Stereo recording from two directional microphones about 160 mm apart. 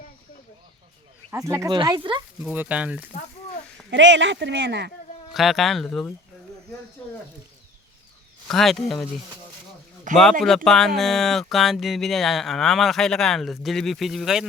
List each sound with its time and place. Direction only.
1.3 s speech: 20° right (ahead or behind)
2.4 s speech: 10° right (ahead or behind)
4.4 s speech: 90° right
5.3 s speech: centre (ahead or behind)
8.4 s speech: centre (ahead or behind)
10.1 s speech: 55° right (ahead or behind)
10.4 s speech: 5° left (ahead or behind)